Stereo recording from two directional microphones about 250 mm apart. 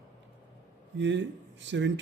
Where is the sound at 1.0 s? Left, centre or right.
Right.